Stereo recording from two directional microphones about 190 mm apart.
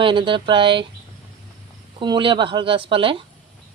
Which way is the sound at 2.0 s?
25° right (ahead or behind).